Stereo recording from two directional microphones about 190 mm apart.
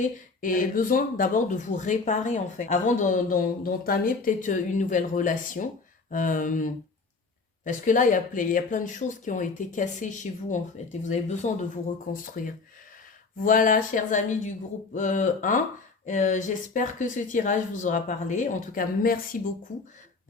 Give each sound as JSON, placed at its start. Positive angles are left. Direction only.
{"t": 0.0, "sound": "speech", "side_deg": 45}